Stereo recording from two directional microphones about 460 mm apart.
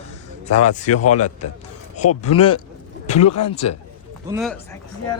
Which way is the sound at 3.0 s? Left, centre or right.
Centre.